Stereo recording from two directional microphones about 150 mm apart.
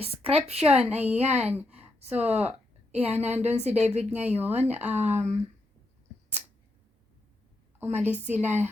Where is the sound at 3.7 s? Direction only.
45° right (ahead or behind).